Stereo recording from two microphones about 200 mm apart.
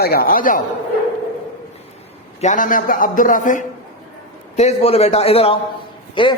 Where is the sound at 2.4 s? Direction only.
40° left (ahead or behind); by 6.4 s 25° left (ahead or behind).